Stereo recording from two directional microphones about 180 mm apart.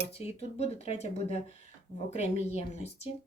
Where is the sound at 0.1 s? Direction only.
35° left (ahead or behind).